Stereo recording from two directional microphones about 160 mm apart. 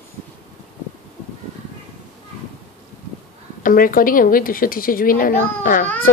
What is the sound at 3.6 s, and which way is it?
A woman's voice, 60° left (ahead or behind).